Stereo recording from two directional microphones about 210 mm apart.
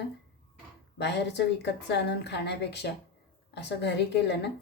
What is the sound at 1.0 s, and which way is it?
A woman's voice, 55° left (ahead or behind).